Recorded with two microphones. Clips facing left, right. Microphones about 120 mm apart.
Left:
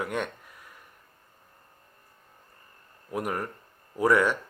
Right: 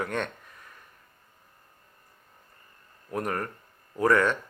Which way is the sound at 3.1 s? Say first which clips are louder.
Even; 10° left (ahead or behind).